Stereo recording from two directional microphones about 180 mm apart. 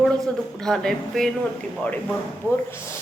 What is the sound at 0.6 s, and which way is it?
Speech, 5° left (ahead or behind).